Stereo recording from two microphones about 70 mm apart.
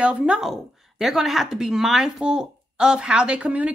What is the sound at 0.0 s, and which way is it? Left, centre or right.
Speech, centre.